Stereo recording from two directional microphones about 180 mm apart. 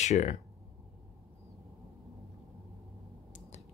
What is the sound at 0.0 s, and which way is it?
Speech, 40° left (ahead or behind).